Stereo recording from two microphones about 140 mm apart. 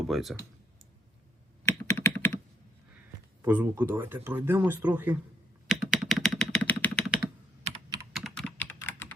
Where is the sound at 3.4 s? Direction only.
15° right (ahead or behind).